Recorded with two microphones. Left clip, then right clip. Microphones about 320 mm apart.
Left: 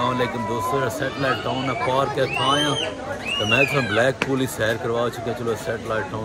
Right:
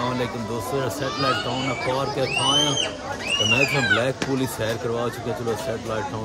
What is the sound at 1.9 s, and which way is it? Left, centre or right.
Speech, centre.